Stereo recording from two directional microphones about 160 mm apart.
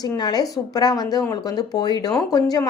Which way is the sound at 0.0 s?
25° left (ahead or behind).